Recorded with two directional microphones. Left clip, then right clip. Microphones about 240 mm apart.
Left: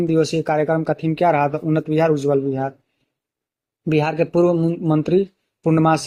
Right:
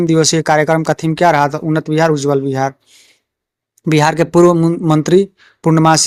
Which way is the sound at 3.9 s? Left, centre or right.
Right.